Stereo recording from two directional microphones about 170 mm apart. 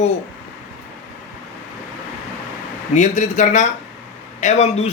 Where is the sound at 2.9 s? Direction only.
45° left (ahead or behind).